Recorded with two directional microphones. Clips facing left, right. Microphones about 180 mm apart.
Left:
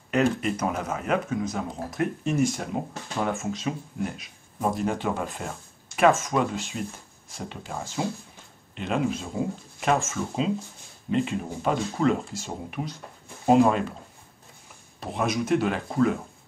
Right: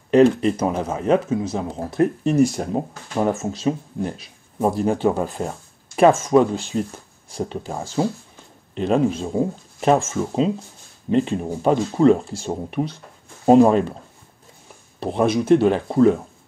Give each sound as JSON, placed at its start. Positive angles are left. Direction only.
{"t": 0.1, "sound": "speech", "side_deg": -30}
{"t": 15.0, "sound": "speech", "side_deg": -30}